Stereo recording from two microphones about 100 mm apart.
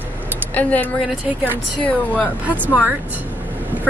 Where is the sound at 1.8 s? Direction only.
15° left (ahead or behind).